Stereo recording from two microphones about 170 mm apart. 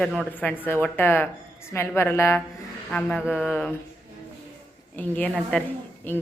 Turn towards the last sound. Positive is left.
turn(degrees=10)  # may be behind; listen again after turning